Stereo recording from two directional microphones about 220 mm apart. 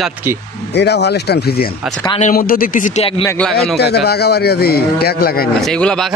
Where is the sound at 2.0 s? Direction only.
25° left (ahead or behind).